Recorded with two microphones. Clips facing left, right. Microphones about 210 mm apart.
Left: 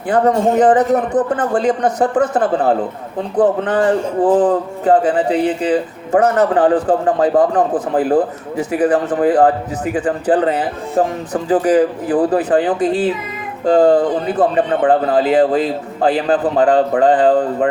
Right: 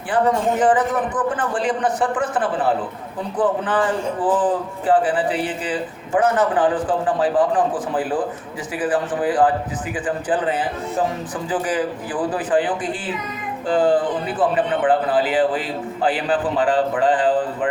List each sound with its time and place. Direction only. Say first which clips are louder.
0.1 s a man's voice: left 5 dB; 40° left (ahead or behind)